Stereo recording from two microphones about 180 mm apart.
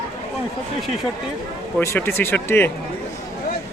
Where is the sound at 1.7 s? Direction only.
15° left (ahead or behind).